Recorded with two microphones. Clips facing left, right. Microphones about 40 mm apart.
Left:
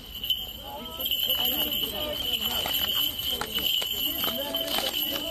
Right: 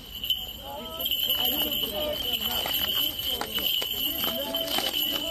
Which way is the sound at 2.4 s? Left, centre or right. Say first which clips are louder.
Even; left.